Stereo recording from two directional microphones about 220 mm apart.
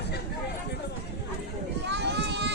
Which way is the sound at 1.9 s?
50° right (ahead or behind).